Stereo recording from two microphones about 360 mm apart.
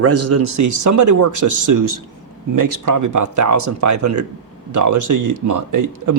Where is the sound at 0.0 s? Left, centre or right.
Right.